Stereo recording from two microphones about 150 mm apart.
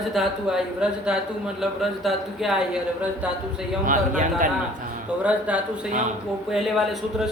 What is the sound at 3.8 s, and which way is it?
Speech, 60° right (ahead or behind).